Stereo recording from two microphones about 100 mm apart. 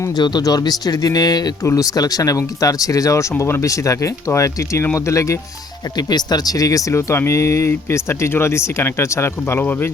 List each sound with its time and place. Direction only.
0.2 s speech: 45° left (ahead or behind); by 5.4 s 30° left (ahead or behind)
6.0 s speech: 45° left (ahead or behind); by 9.9 s 20° left (ahead or behind)